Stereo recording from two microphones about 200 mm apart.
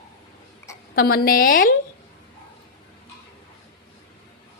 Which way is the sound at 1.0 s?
50° left (ahead or behind).